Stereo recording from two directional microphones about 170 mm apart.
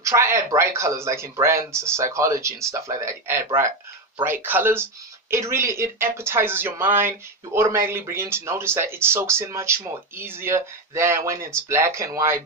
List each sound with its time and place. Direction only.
0.0 s speech: 15° right (ahead or behind)